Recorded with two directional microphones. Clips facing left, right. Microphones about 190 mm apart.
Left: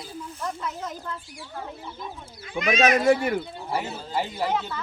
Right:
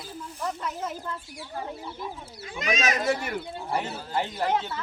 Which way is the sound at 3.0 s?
55° left (ahead or behind).